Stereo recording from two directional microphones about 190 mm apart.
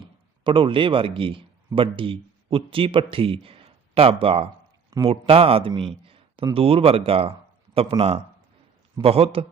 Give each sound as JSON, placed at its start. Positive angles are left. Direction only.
{"t": 0.0, "sound": "a man's voice", "side_deg": -25}